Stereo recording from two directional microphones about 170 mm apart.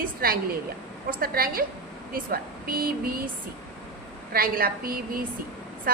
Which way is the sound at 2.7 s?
60° right (ahead or behind).